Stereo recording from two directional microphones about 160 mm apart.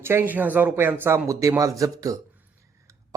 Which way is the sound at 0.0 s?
15° right (ahead or behind).